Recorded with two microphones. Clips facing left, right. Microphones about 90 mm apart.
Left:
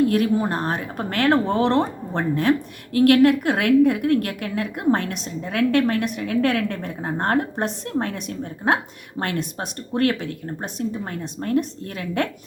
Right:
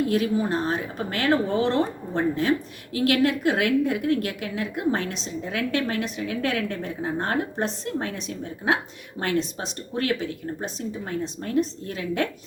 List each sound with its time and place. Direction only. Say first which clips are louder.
0.1 s speech: left 3 dB; 50° left (ahead or behind)